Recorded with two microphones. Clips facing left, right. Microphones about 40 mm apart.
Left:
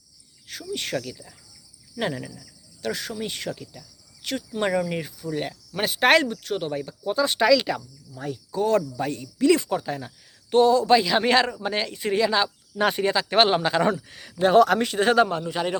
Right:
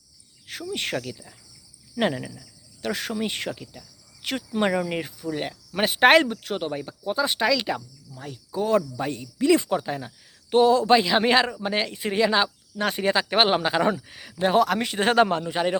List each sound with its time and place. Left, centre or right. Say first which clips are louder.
0.7 s speech: even; right
1.0 s speech: right 1 dB; centre
2.8 s speech: right 2 dB; right
3.5 s speech: left 1 dB; centre
4.2 s speech: right 2 dB; right
4.6 s speech: even; centre
5.2 s cricket: even; centre
5.8 s speech: right 2 dB; right
7.3 s speech: left 4 dB; centre
8.6 s speech: even; centre
10.9 s speech: even; centre
12.7 s speech: left 5 dB; centre
13.3 s speech: left 3 dB; centre
14.9 s speech: right 2 dB; centre